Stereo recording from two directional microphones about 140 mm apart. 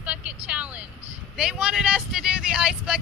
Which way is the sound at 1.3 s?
5° right (ahead or behind).